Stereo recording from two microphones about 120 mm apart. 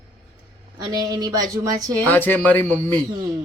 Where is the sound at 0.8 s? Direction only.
35° right (ahead or behind).